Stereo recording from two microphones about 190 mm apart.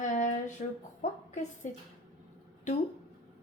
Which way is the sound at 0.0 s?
40° left (ahead or behind).